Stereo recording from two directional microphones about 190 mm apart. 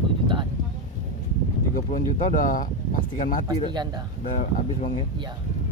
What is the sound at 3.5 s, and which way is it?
Speech, 20° right (ahead or behind).